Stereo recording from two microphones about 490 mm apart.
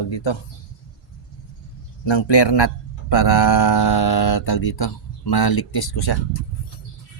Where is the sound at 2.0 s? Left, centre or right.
Left.